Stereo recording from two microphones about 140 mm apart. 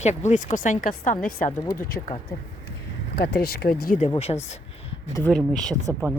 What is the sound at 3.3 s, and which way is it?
Speech, 90° left.